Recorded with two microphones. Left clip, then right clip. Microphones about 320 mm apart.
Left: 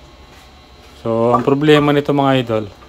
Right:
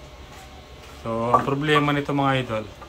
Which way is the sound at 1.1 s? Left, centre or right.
Left.